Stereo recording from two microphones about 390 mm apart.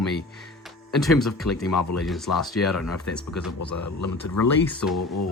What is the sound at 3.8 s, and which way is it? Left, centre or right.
Speech, left.